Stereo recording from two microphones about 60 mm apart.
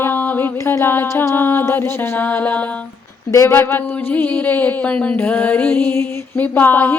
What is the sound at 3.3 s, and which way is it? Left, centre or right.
Female singing, left.